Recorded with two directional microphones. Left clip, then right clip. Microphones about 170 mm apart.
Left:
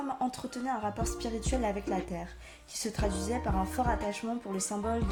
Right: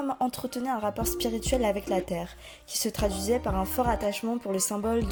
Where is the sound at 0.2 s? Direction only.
55° right (ahead or behind).